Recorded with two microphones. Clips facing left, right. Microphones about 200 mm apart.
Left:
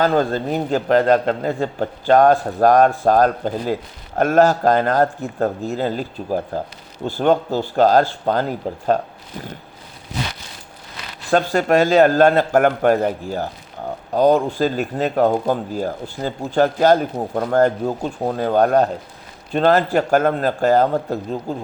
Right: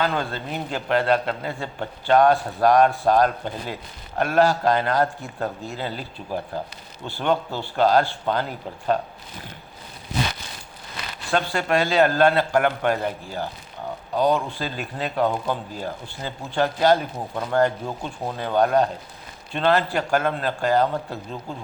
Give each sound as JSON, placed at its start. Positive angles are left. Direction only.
{"t": 0.0, "sound": "a man's voice", "side_deg": 40}
{"t": 11.3, "sound": "a man's voice", "side_deg": 40}